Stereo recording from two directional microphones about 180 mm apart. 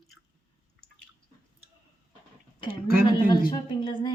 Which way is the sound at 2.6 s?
25° left (ahead or behind).